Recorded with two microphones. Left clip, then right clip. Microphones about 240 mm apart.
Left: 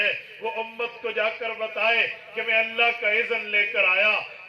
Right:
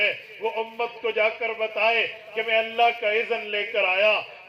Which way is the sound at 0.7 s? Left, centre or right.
Left.